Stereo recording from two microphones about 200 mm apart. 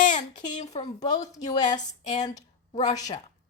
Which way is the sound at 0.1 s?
40° left (ahead or behind).